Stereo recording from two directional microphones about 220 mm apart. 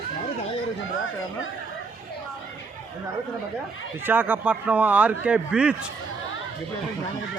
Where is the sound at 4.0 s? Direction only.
10° right (ahead or behind).